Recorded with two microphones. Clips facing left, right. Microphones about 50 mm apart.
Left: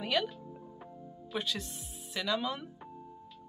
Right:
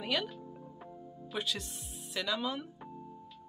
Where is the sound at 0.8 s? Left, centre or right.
Centre.